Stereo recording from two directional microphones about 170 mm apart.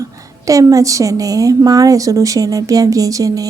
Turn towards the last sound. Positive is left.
turn(degrees=-20)  # may be behind; listen again after turning